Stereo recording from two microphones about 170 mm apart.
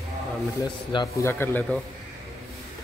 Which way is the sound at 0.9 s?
25° left (ahead or behind).